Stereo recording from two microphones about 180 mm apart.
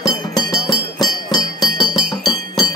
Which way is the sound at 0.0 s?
20° left (ahead or behind).